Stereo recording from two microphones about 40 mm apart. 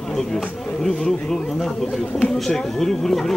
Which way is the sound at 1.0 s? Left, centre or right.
Centre.